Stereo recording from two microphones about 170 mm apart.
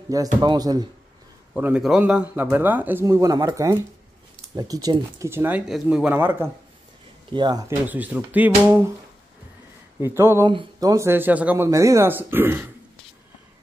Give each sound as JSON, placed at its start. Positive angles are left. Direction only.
{"t": 0.1, "sound": "speech", "side_deg": -20}
{"t": 1.5, "sound": "speech", "side_deg": -5}
{"t": 7.3, "sound": "speech", "side_deg": -25}
{"t": 7.9, "sound": "speech", "side_deg": -10}
{"t": 9.9, "sound": "speech", "side_deg": -15}